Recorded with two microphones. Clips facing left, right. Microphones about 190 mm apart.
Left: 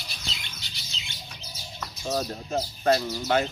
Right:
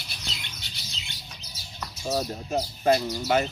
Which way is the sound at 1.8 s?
5° right (ahead or behind).